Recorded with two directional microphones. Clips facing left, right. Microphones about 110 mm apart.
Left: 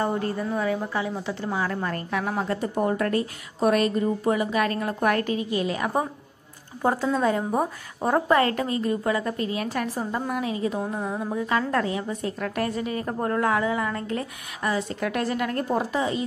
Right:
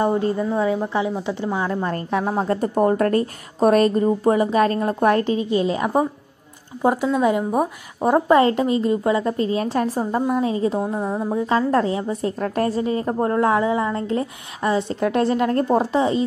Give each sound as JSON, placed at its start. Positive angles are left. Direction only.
{"t": 0.0, "sound": "a woman's voice", "side_deg": -20}